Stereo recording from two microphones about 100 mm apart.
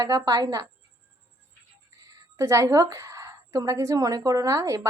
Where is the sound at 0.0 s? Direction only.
35° right (ahead or behind).